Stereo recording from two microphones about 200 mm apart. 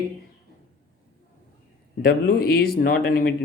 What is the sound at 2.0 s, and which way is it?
Speech, 50° left (ahead or behind).